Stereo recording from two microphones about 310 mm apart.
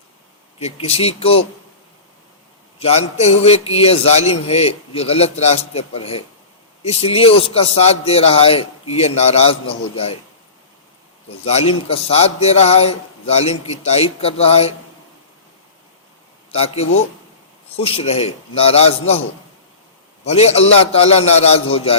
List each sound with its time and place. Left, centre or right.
0.6 s a man's voice: centre
2.7 s a man's voice: centre
11.4 s a man's voice: centre
16.5 s a man's voice: centre
20.2 s a man's voice: centre